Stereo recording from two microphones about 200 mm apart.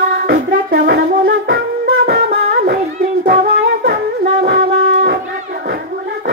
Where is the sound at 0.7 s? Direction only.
60° right (ahead or behind).